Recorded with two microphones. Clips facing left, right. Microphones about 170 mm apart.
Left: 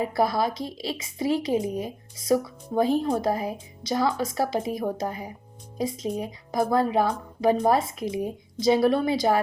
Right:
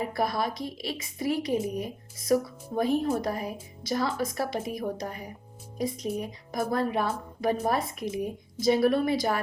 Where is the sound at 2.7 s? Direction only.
30° left (ahead or behind).